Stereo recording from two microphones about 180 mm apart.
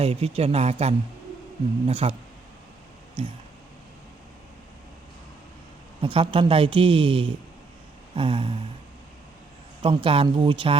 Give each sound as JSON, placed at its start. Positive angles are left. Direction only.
{"t": 0.0, "sound": "speech", "side_deg": -35}
{"t": 3.2, "sound": "speech", "side_deg": -30}
{"t": 6.0, "sound": "speech", "side_deg": -30}
{"t": 9.8, "sound": "speech", "side_deg": -30}